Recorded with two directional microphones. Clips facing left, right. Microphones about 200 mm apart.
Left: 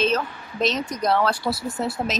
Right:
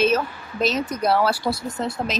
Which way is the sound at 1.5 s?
5° left (ahead or behind).